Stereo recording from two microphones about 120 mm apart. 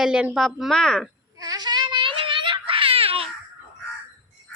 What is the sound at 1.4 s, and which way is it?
Baby cry, 30° right (ahead or behind).